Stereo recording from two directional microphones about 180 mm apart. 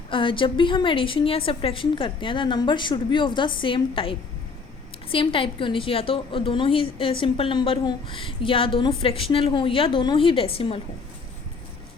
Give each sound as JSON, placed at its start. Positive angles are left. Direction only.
{"t": 0.1, "sound": "a woman's voice", "side_deg": 30}